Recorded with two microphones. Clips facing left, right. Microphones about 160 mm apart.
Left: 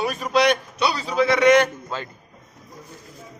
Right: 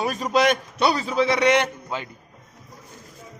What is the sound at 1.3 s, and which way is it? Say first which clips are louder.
Speech: left 6 dB; 30° right (ahead or behind).